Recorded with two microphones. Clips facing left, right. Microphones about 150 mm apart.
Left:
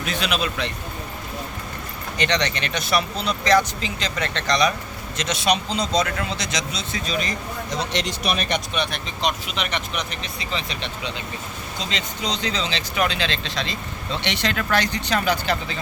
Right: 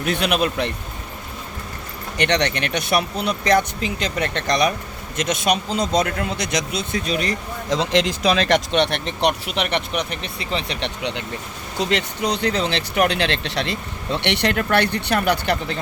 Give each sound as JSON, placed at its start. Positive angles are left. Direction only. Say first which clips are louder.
{"t": 0.0, "sound": "speech", "louder": "right 5 dB", "side_deg": -60}
{"t": 2.1, "sound": "speech", "louder": "right 3 dB", "side_deg": -65}
{"t": 8.4, "sound": "speech", "louder": "right 7 dB", "side_deg": -90}